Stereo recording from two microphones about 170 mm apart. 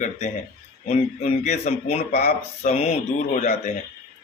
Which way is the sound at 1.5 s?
40° left (ahead or behind).